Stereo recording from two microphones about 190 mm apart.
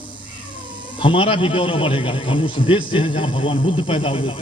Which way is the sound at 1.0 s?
25° left (ahead or behind).